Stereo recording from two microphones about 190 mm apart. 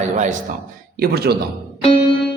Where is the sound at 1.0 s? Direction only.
55° right (ahead or behind).